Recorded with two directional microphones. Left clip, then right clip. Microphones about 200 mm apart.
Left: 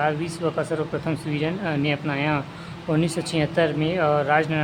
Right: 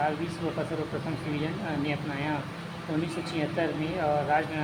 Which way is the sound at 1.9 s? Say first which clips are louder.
Left 7 dB; 35° left (ahead or behind).